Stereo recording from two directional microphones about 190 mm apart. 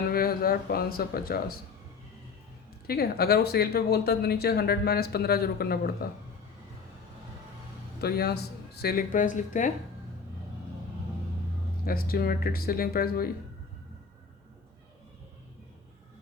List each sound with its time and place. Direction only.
0.1 s speech: 50° left (ahead or behind)
2.8 s speech: 55° left (ahead or behind)
8.0 s speech: 55° left (ahead or behind)
11.9 s speech: 50° left (ahead or behind)